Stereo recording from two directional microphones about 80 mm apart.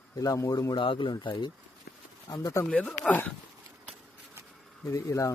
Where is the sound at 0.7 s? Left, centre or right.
Left.